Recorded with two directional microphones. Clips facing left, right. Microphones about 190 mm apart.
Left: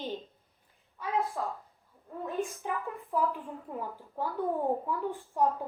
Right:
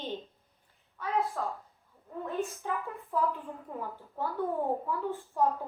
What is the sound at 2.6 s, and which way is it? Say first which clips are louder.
Speech: even; 15° left (ahead or behind).